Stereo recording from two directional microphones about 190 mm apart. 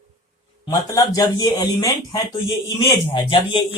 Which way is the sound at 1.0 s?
20° left (ahead or behind).